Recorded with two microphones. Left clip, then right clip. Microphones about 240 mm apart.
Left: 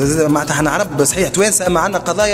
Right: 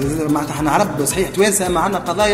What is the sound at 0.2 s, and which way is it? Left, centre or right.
Speech, left.